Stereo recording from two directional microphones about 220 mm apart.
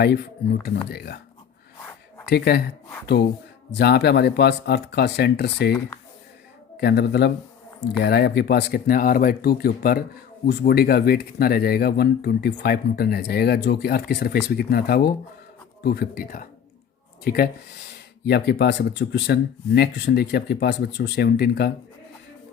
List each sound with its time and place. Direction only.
0.6 s speech: 45° left (ahead or behind)
2.3 s speech: 45° left (ahead or behind)
3.7 s speech: 50° left (ahead or behind)
6.7 s speech: 50° left (ahead or behind)